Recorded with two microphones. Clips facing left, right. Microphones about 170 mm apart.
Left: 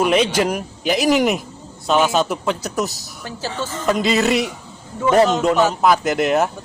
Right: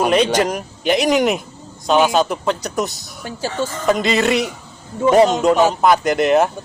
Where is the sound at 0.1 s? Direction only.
5° left (ahead or behind).